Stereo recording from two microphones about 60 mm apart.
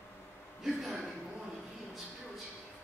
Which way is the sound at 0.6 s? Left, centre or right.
Centre.